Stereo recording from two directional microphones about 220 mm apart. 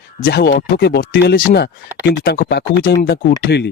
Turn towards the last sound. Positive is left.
turn(degrees=50)  # may be behind; listen again after turning